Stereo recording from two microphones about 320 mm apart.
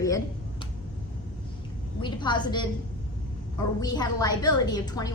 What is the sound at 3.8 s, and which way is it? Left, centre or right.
A woman's voice, centre.